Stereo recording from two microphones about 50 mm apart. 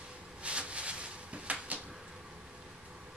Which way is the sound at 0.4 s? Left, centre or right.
Right.